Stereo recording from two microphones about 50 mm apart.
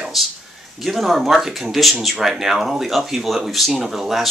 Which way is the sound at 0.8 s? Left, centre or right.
Centre.